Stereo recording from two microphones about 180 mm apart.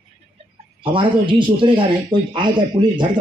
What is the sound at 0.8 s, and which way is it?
Speech, 30° right (ahead or behind).